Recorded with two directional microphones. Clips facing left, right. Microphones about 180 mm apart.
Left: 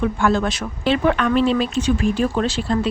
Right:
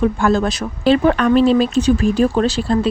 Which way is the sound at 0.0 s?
40° right (ahead or behind).